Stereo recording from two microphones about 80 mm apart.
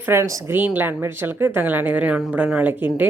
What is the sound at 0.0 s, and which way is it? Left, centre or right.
Speech, right.